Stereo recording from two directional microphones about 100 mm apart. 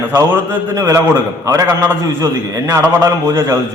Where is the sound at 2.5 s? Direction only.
30° right (ahead or behind).